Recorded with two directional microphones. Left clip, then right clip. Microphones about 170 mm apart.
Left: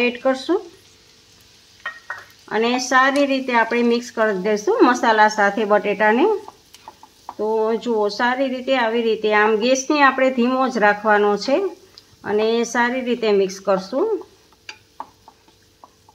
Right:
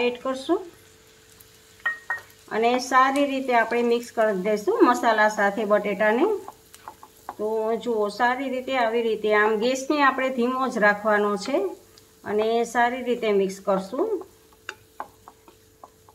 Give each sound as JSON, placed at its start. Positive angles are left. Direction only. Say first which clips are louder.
{"t": 0.0, "sound": "speech", "louder": "left 6 dB", "side_deg": 55}
{"t": 2.5, "sound": "a woman's voice", "louder": "left 3 dB", "side_deg": 55}
{"t": 7.5, "sound": "a woman's voice", "louder": "left 5 dB", "side_deg": 55}